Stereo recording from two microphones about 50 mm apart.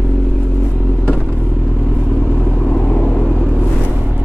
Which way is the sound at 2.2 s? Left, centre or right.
Centre.